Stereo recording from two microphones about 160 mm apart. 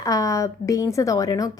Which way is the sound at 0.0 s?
20° left (ahead or behind).